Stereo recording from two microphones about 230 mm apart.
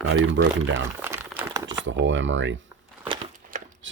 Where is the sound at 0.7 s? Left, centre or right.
Centre.